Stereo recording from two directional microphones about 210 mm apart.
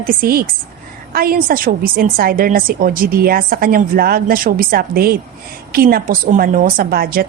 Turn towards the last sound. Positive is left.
turn(degrees=-45)  # may be behind; listen again after turning